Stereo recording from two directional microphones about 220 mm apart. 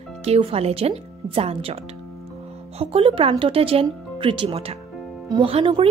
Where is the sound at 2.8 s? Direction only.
25° right (ahead or behind).